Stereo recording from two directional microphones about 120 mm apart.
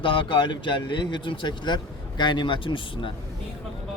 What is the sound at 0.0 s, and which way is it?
Speech, 45° left (ahead or behind).